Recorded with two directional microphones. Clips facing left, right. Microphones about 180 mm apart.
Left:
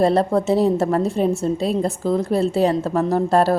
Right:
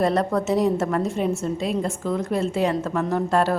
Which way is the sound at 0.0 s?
30° left (ahead or behind).